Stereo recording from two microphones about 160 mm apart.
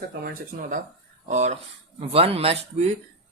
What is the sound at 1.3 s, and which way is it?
Speech, 45° right (ahead or behind).